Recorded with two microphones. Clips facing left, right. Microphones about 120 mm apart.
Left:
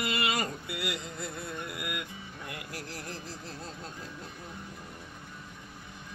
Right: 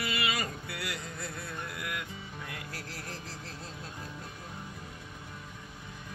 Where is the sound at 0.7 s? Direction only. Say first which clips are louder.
Left 3 dB; 20° left (ahead or behind).